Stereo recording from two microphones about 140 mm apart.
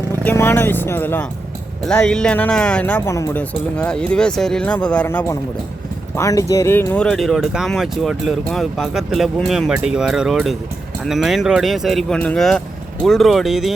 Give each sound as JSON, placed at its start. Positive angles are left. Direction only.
{"t": 0.3, "sound": "speech", "side_deg": 15}
{"t": 5.0, "sound": "speech", "side_deg": 20}